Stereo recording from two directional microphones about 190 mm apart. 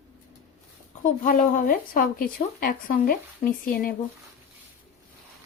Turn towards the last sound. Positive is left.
turn(degrees=50)  # may be behind; listen again after turning